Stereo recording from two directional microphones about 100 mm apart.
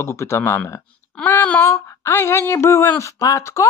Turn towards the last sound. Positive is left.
turn(degrees=30)  # may be behind; listen again after turning